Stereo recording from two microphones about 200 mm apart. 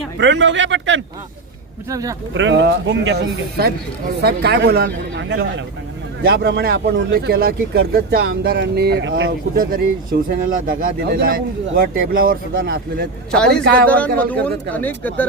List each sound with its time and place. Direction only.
0.2 s speech: 60° right (ahead or behind)
1.9 s speech: 15° right (ahead or behind)
2.3 s speech: 65° right (ahead or behind)
9.6 s speech: 45° right (ahead or behind)
13.8 s speech: 5° left (ahead or behind)